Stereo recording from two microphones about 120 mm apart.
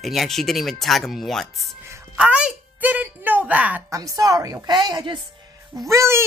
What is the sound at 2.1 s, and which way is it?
A woman's voice, 10° right (ahead or behind).